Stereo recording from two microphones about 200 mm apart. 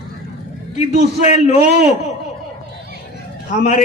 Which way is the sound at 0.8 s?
35° left (ahead or behind).